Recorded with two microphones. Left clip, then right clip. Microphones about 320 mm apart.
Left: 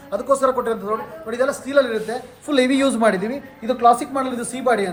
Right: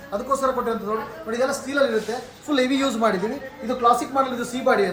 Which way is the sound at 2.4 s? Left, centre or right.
Left.